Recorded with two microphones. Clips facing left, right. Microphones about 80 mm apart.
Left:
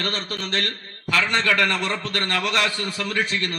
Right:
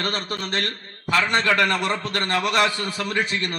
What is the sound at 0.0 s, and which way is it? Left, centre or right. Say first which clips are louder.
A man's voice: right 1 dB; centre.